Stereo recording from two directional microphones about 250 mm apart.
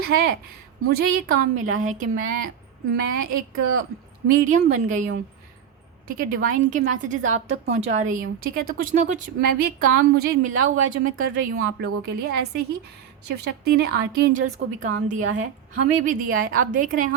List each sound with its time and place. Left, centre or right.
0.0 s a woman's voice: right
11.5 s a woman's voice: right